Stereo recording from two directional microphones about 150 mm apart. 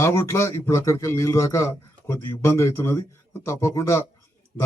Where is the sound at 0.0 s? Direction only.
15° left (ahead or behind).